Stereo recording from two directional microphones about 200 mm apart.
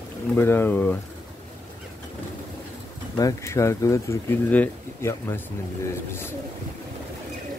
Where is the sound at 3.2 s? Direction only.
15° left (ahead or behind).